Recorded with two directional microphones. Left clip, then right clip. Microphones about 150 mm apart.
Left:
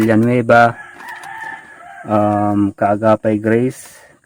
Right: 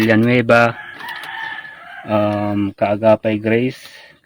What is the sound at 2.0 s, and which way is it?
Speech, 30° left (ahead or behind).